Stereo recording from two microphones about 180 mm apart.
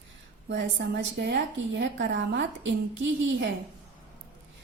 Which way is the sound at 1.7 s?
75° right (ahead or behind).